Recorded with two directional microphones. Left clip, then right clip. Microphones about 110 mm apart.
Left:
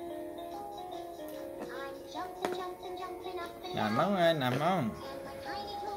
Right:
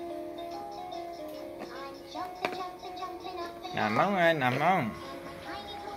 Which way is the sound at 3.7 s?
35° left (ahead or behind).